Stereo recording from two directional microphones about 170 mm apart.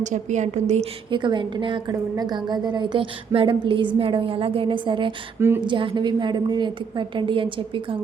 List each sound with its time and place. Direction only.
0.0 s a woman's voice: 45° right (ahead or behind)
1.1 s a woman's voice: 25° right (ahead or behind)